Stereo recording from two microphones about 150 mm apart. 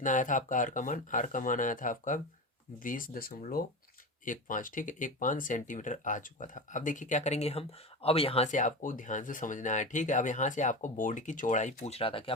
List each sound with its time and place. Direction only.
0.0 s speech: 60° left (ahead or behind); by 3.6 s 75° left (ahead or behind)
4.3 s speech: 60° left (ahead or behind); by 8.4 s 40° left (ahead or behind)
8.4 s speech: 55° left (ahead or behind); by 12.3 s 35° left (ahead or behind)